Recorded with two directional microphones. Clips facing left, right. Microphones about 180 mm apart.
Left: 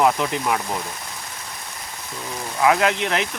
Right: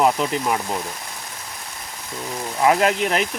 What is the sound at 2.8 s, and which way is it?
Speech, 40° right (ahead or behind).